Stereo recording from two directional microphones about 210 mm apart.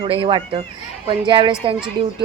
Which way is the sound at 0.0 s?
25° right (ahead or behind).